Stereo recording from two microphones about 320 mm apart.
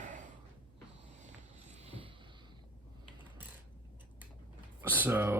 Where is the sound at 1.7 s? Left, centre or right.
Centre.